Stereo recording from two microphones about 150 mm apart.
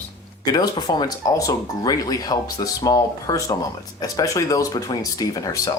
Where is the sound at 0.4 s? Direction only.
25° left (ahead or behind).